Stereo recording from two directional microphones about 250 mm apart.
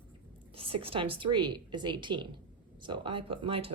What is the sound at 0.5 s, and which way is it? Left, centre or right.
Speech, right.